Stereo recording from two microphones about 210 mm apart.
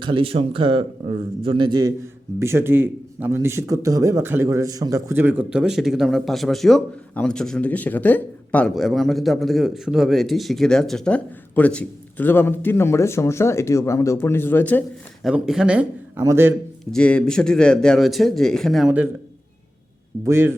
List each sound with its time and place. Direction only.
0.0 s a man's voice: 25° right (ahead or behind); by 15.3 s 10° left (ahead or behind)
15.3 s speech: 5° right (ahead or behind)
16.8 s speech: 5° left (ahead or behind)
20.2 s speech: 10° right (ahead or behind)